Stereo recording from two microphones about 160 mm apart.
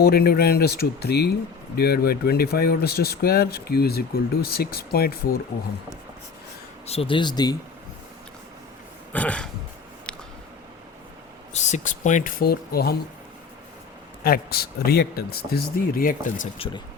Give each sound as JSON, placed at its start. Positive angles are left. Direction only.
{"t": 0.0, "sound": "speech", "side_deg": 75}
{"t": 6.8, "sound": "speech", "side_deg": 40}
{"t": 9.1, "sound": "throat clearing", "side_deg": 10}
{"t": 10.1, "sound": "a sound", "side_deg": 5}
{"t": 11.5, "sound": "speech", "side_deg": 45}
{"t": 14.3, "sound": "speech", "side_deg": 75}